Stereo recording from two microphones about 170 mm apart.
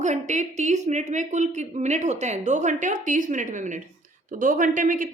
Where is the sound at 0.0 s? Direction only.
45° right (ahead or behind).